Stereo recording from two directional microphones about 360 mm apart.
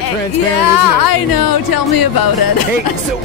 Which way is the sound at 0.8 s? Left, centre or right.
Left.